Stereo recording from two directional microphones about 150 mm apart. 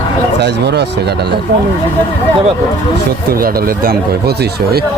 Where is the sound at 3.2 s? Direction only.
80° right.